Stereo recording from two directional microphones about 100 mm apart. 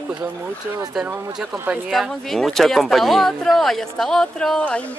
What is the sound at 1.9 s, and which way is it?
Speech, centre (ahead or behind).